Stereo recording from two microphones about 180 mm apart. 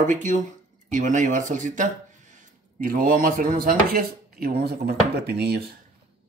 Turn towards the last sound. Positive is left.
turn(degrees=-65)  # may be behind; listen again after turning